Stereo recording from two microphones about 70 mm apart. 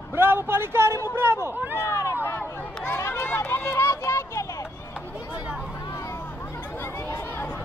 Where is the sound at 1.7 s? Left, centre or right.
Left.